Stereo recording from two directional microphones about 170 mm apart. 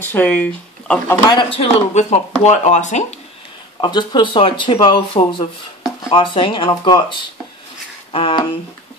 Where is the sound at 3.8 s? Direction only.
25° left (ahead or behind).